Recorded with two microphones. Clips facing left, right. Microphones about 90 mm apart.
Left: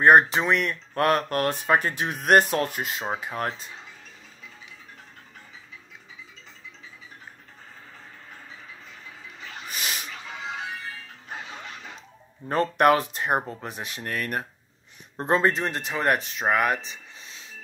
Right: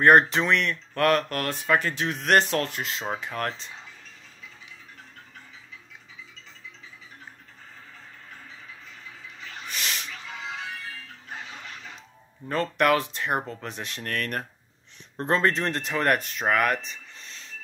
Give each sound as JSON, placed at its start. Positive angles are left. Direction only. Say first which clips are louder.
{"t": 0.0, "sound": "speech", "louder": "left 1 dB", "side_deg": 10}
{"t": 0.9, "sound": "speech", "louder": "even", "side_deg": 25}
{"t": 9.7, "sound": "snake", "louder": "even", "side_deg": 10}
{"t": 12.4, "sound": "speech", "louder": "left 3 dB", "side_deg": 25}
{"t": 16.4, "sound": "a sound", "louder": "even", "side_deg": 10}